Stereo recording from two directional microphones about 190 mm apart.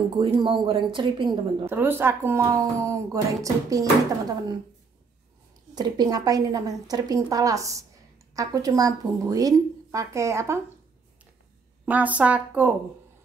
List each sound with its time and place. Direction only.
0.2 s a woman's voice: 25° right (ahead or behind)
1.7 s a woman's voice: 10° right (ahead or behind)
5.8 s a woman's voice: 20° right (ahead or behind)
11.8 s a woman's voice: 10° right (ahead or behind)